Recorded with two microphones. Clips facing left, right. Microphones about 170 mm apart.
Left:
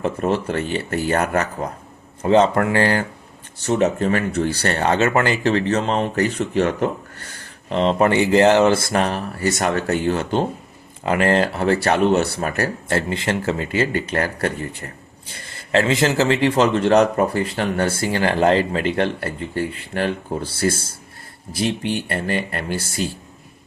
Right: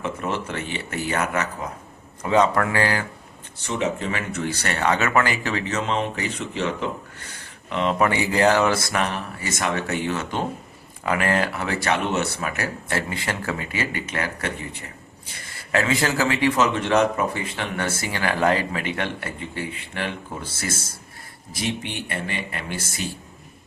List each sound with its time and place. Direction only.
0.0 s speech: 35° left (ahead or behind)
2.3 s speech: 30° left (ahead or behind); by 4.2 s 45° left (ahead or behind)
4.3 s speech: 35° left (ahead or behind); by 6.9 s 50° left (ahead or behind)
7.7 s a man's voice: 35° left (ahead or behind)
15.7 s a man's voice: 20° left (ahead or behind)
22.0 s speech: 50° left (ahead or behind)
22.8 s speech: 35° left (ahead or behind)